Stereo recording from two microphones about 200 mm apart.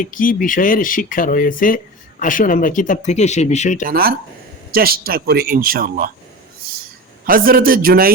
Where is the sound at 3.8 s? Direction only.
50° right (ahead or behind).